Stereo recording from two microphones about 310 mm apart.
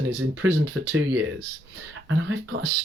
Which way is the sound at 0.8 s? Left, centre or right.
Right.